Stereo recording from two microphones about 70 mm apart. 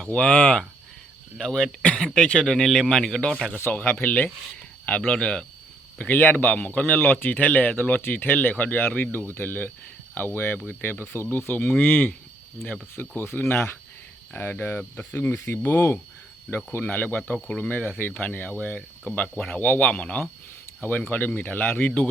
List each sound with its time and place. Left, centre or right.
0.0 s speech: centre
1.8 s speech: centre
3.2 s speech: centre
19.3 s speech: centre
19.5 s speech: left